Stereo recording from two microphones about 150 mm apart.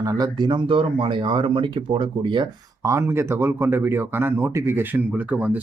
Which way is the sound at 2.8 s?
20° right (ahead or behind).